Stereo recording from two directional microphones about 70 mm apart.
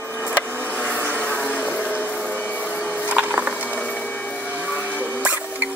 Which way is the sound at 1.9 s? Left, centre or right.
Left.